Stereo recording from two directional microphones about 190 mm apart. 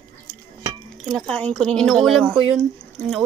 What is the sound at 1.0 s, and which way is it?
Speech, 5° left (ahead or behind).